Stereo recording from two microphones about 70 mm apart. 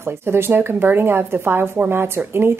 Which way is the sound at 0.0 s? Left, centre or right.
Right.